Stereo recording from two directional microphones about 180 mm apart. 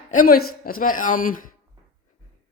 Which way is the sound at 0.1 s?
50° left (ahead or behind).